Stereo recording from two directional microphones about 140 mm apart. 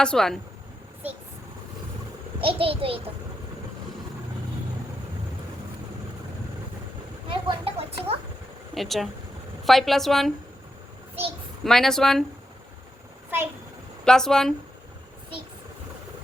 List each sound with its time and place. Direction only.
0.0 s a woman's voice: 5° left (ahead or behind)
2.4 s a child's voice: 40° right (ahead or behind)
7.3 s speech: 40° right (ahead or behind)
8.7 s a woman's voice: centre (ahead or behind)
11.6 s a woman's voice: centre (ahead or behind)
14.0 s a woman's voice: 5° left (ahead or behind)